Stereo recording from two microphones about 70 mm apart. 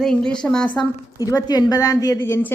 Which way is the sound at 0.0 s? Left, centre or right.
Centre.